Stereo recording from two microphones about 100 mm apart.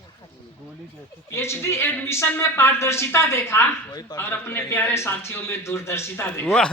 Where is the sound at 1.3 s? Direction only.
25° left (ahead or behind).